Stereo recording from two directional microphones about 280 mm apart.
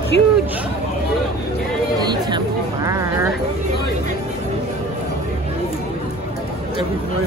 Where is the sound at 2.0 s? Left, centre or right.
Centre.